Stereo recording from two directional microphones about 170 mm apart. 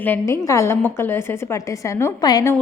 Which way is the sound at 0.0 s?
15° left (ahead or behind).